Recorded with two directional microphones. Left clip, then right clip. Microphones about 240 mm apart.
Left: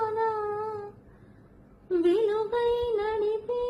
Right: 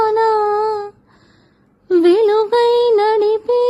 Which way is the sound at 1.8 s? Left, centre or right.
Right.